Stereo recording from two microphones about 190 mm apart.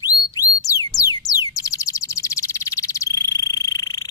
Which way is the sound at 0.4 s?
20° left (ahead or behind).